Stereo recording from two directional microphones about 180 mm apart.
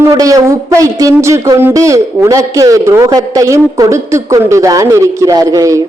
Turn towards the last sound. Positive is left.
turn(degrees=-20)  # may be behind; listen again after turning